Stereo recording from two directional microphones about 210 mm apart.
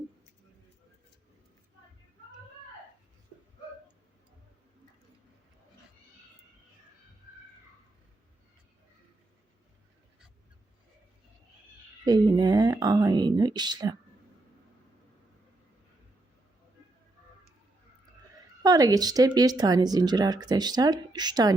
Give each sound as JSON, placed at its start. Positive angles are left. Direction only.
{"t": 12.0, "sound": "speech", "side_deg": -20}
{"t": 18.6, "sound": "speech", "side_deg": -15}